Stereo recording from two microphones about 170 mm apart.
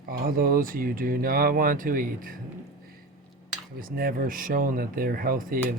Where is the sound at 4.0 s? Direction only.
55° right (ahead or behind).